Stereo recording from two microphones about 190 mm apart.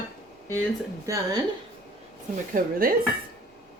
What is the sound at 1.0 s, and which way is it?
Speech, 15° right (ahead or behind).